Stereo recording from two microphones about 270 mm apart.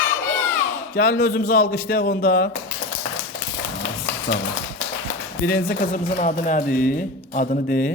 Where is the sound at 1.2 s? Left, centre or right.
Left.